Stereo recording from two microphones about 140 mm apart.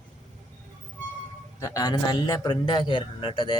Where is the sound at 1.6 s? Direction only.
20° left (ahead or behind).